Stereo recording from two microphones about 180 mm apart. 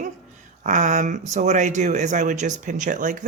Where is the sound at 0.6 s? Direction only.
45° right (ahead or behind).